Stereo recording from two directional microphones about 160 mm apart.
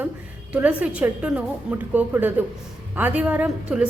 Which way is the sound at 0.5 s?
10° right (ahead or behind).